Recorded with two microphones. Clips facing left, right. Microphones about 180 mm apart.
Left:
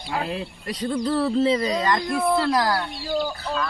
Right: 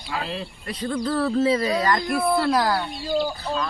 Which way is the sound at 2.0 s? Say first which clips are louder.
Even; 10° right (ahead or behind).